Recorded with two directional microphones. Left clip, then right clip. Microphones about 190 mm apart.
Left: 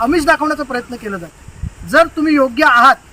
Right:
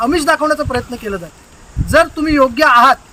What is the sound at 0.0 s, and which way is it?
Speech, 15° right (ahead or behind).